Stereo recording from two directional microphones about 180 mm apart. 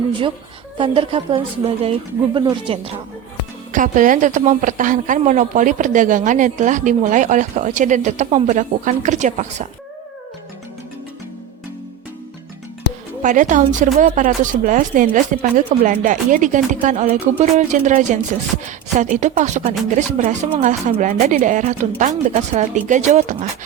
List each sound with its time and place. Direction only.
0.1 s a woman's voice: 30° right (ahead or behind)
3.7 s a woman's voice: 45° right (ahead or behind)
13.2 s a woman's voice: 45° right (ahead or behind)